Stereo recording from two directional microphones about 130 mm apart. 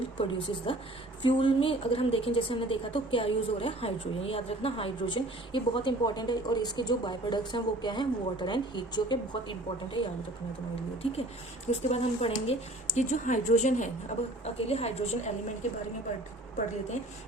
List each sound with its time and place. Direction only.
0.2 s a woman's voice: 40° left (ahead or behind)
11.7 s speech: 50° left (ahead or behind); by 13.9 s 70° left (ahead or behind)
14.4 s a woman's voice: 55° left (ahead or behind)